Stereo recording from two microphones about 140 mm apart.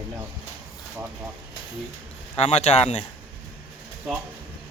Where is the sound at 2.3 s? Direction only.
50° left (ahead or behind).